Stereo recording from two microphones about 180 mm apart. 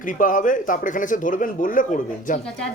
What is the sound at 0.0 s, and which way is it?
A man's voice, 45° left (ahead or behind).